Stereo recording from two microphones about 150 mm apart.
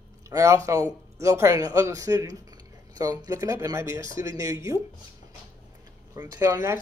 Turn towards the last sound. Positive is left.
turn(degrees=-20)  # may be behind; listen again after turning